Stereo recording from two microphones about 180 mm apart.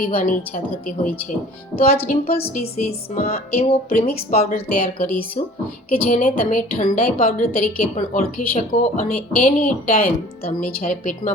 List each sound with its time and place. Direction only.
0.0 s speech: 50° left (ahead or behind)
1.7 s music: 35° left (ahead or behind)
2.3 s a woman's voice: 60° left (ahead or behind)
3.2 s music: 35° left (ahead or behind)
4.5 s speech: 55° left (ahead or behind)